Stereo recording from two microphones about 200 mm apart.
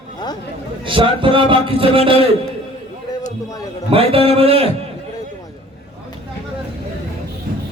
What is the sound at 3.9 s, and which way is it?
Speech, 30° right (ahead or behind).